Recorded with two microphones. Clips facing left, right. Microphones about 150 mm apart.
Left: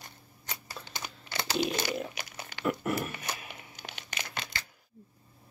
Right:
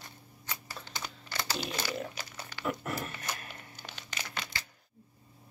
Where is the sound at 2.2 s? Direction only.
15° left (ahead or behind).